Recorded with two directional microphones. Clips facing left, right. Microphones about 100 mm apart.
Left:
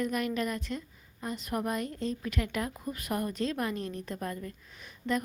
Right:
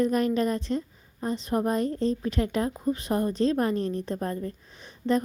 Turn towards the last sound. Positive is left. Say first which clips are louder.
# right 6 dB
turn(degrees=-35)  # may be behind; listen again after turning